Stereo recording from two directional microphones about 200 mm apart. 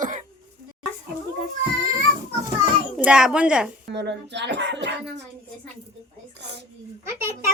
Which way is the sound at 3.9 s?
60° right (ahead or behind).